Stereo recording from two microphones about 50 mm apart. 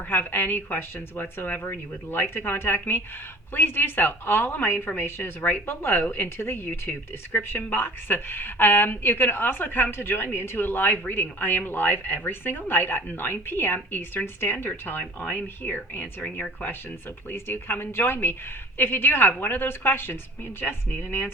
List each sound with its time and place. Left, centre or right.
0.1 s a woman's voice: left
17.2 s a woman's voice: left